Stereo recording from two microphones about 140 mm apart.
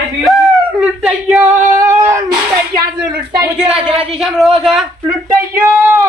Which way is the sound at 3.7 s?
45° right (ahead or behind).